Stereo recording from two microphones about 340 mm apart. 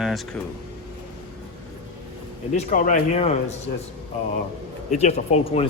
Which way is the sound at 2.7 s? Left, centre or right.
Left.